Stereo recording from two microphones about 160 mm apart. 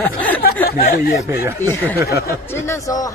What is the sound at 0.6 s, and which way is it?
Speech, 70° left (ahead or behind).